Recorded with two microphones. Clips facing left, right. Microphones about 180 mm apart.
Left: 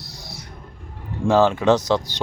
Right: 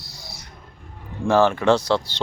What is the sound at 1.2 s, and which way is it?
Speech, 15° left (ahead or behind).